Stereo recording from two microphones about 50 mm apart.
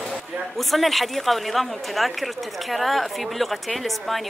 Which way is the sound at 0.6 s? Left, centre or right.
Centre.